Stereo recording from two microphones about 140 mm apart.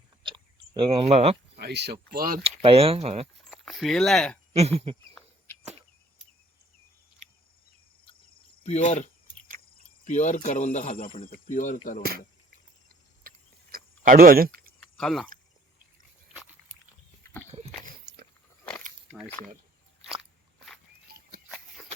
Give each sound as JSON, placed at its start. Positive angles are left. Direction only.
{"t": 0.2, "sound": "chewing", "side_deg": -35}
{"t": 2.0, "sound": "speech", "side_deg": -85}
{"t": 2.4, "sound": "speech", "side_deg": -45}
{"t": 3.3, "sound": "speech", "side_deg": 0}
{"t": 4.5, "sound": "speech", "side_deg": -45}
{"t": 8.6, "sound": "speech", "side_deg": 50}
{"t": 11.2, "sound": "speech", "side_deg": 80}
{"t": 13.2, "sound": "chewing", "side_deg": -90}
{"t": 14.8, "sound": "chewing", "side_deg": 5}
{"t": 19.4, "sound": "speech", "side_deg": 20}
{"t": 21.1, "sound": "a sound", "side_deg": -90}